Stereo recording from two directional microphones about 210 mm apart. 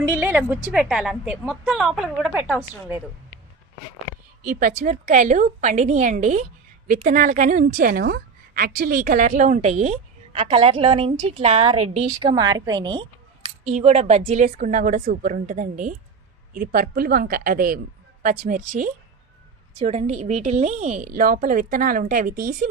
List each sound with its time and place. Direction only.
0.1 s a woman's voice: 10° right (ahead or behind)
4.4 s a woman's voice: 40° right (ahead or behind); by 13.1 s 20° right (ahead or behind)
13.7 s a woman's voice: 30° right (ahead or behind)